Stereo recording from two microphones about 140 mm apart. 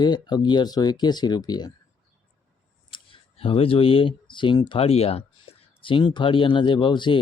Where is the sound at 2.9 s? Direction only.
40° left (ahead or behind).